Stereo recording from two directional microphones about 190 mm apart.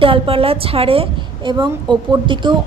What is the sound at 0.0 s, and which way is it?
A woman's voice, 30° right (ahead or behind).